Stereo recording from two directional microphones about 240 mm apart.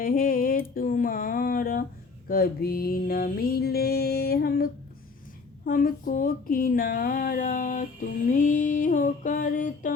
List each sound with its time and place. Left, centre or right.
0.0 s music: left
5.6 s music: left